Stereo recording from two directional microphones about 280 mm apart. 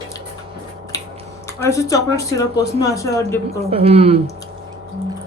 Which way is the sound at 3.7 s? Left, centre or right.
Right.